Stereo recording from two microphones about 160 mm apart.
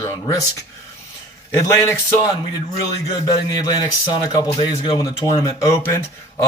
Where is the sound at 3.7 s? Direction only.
25° left (ahead or behind).